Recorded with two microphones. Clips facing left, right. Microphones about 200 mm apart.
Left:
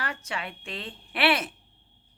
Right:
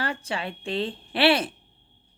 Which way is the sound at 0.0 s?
30° right (ahead or behind).